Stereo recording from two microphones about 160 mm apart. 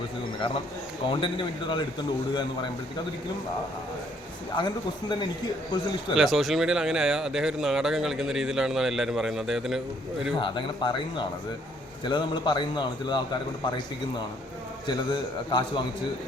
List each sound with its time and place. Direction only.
1.2 s a man's voice: 30° left (ahead or behind)
4.5 s a man's voice: 30° left (ahead or behind)
6.1 s speech: centre (ahead or behind)
10.3 s a man's voice: 30° left (ahead or behind)
14.8 s a man's voice: 30° left (ahead or behind)